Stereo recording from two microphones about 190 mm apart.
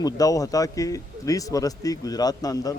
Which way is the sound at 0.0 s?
20° left (ahead or behind).